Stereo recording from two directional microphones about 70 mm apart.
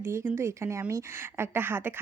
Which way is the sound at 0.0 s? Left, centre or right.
Right.